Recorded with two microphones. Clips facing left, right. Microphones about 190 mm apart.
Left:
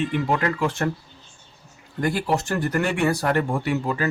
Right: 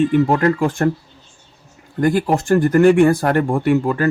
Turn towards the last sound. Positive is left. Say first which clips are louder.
# right 8 dB
turn(degrees=-50)  # may be behind; listen again after turning